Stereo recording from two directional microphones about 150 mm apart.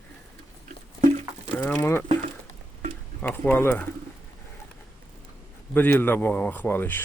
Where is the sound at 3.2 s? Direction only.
10° left (ahead or behind).